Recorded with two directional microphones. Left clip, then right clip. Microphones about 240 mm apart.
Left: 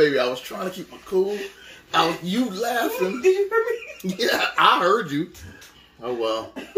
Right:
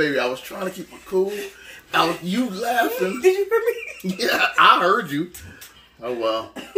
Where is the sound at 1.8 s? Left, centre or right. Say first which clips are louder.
Right 1 dB; centre.